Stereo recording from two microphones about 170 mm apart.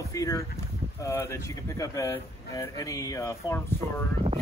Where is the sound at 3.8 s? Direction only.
35° right (ahead or behind).